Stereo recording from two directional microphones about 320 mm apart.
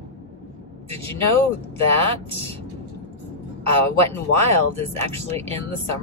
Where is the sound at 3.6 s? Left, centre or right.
Centre.